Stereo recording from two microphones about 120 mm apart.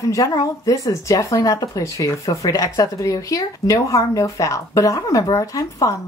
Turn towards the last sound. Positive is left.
turn(degrees=30)  # may be behind; listen again after turning